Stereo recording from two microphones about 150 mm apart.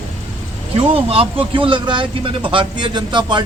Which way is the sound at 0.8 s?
40° right (ahead or behind).